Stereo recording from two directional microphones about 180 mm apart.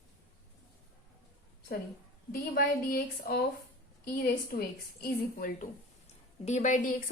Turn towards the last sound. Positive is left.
turn(degrees=45)  # may be behind; listen again after turning